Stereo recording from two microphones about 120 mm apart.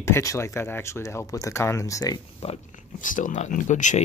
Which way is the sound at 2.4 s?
75° left (ahead or behind).